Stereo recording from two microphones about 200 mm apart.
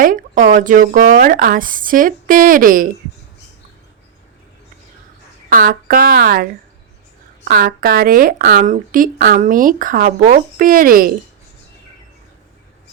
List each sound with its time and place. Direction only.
0.0 s speech: 40° right (ahead or behind)
5.5 s speech: 45° right (ahead or behind)